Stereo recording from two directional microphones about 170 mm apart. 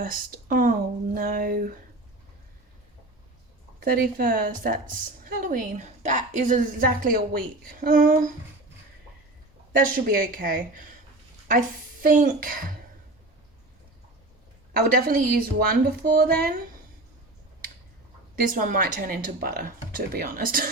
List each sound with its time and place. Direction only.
0.0 s a woman's voice: 60° right (ahead or behind)
3.8 s a woman's voice: 60° right (ahead or behind)
9.7 s a woman's voice: 55° right (ahead or behind)
12.0 s a woman's voice: 50° right (ahead or behind)
14.7 s a woman's voice: 60° right (ahead or behind)
18.4 s a woman's voice: 55° right (ahead or behind)